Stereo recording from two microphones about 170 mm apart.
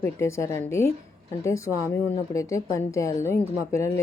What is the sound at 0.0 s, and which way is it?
Speech, 15° left (ahead or behind).